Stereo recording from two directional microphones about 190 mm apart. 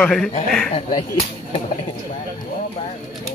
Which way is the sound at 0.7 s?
35° left (ahead or behind).